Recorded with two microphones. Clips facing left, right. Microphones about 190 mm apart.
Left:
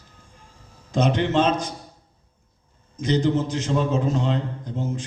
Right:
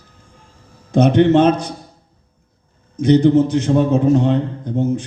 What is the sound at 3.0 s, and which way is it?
A man's voice, 65° right (ahead or behind).